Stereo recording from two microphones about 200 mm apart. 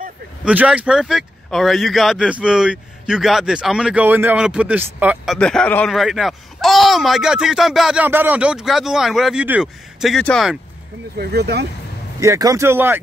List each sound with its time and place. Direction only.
0.5 s speech: 5° right (ahead or behind)
11.1 s speech: 55° right (ahead or behind)
12.2 s speech: 15° right (ahead or behind)